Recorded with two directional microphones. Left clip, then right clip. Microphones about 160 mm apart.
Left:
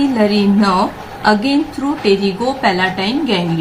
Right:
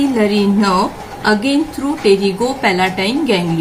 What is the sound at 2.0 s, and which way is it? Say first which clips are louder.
A woman's voice: right 2 dB; 15° left (ahead or behind).